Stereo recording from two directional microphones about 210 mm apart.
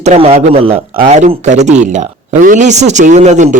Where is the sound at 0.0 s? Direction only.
30° right (ahead or behind).